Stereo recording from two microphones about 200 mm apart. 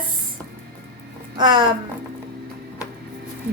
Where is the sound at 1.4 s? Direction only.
25° right (ahead or behind).